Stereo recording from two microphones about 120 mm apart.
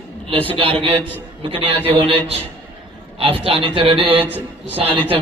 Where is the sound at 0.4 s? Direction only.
50° right (ahead or behind).